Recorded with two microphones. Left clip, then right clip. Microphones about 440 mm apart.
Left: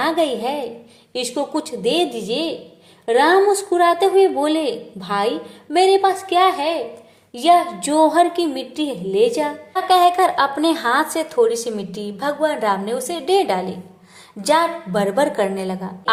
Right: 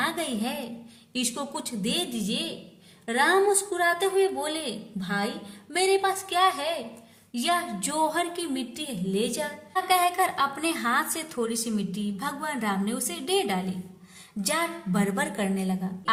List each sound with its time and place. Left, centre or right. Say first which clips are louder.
0.0 s a woman's voice: left 10 dB; right